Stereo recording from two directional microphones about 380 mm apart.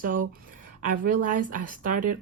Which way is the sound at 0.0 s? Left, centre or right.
Right.